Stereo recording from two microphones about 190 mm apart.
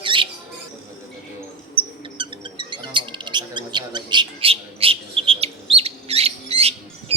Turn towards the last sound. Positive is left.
turn(degrees=-30)  # may be behind; listen again after turning